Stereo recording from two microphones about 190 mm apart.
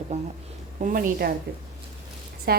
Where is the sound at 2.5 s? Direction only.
55° right (ahead or behind).